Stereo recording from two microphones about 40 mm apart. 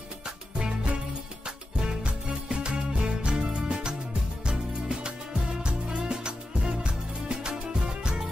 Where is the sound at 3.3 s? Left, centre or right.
Right.